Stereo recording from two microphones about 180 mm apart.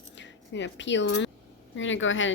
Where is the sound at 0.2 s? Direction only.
85° left.